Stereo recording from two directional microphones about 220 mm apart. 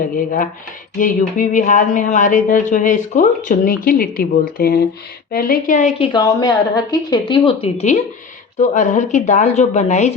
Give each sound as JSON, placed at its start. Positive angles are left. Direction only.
{"t": 0.9, "sound": "speech", "side_deg": 35}
{"t": 6.1, "sound": "a woman's voice", "side_deg": 15}